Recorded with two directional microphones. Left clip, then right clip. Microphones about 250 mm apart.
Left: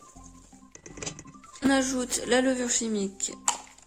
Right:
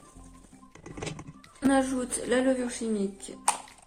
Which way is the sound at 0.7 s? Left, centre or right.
Centre.